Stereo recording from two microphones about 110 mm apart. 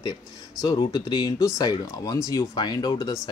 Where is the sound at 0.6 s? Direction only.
40° left (ahead or behind).